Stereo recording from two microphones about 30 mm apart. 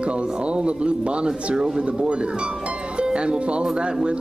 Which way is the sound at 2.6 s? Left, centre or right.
Right.